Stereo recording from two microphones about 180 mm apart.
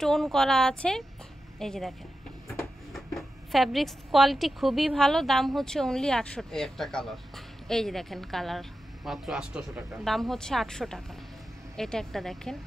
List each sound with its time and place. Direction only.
0.0 s a woman's voice: centre (ahead or behind)